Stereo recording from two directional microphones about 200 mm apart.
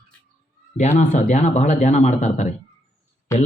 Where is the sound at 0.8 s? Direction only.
35° left (ahead or behind).